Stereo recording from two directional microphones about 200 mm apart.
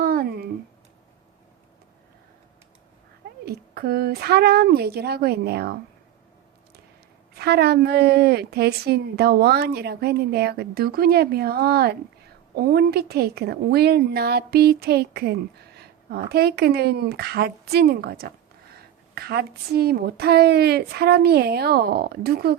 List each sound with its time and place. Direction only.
0.0 s a sound: 50° right (ahead or behind)
3.4 s a woman's voice: 50° right (ahead or behind)
7.3 s a woman's voice: 55° right (ahead or behind)